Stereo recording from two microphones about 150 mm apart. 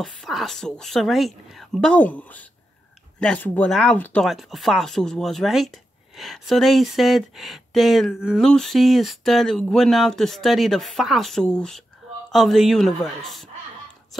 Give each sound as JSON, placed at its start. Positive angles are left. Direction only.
{"t": 0.0, "sound": "speech", "side_deg": 0}